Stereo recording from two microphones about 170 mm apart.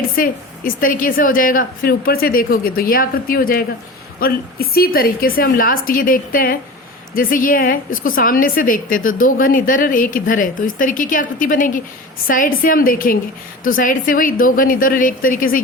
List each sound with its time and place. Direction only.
0.2 s a woman's voice: 55° left (ahead or behind)